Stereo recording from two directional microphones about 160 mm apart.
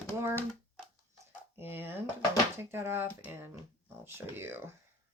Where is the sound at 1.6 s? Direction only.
15° right (ahead or behind).